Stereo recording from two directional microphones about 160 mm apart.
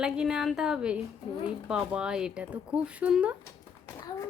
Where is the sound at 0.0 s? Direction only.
5° right (ahead or behind).